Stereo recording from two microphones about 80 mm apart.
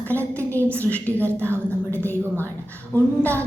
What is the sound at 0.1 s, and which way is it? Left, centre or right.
Speech, left.